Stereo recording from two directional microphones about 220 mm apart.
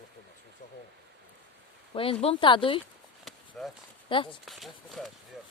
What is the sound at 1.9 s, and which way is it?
Speech, 25° left (ahead or behind).